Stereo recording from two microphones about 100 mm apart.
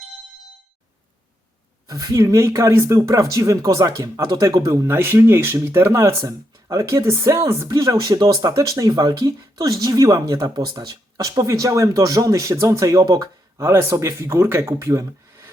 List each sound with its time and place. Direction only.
1.9 s speech: 35° right (ahead or behind)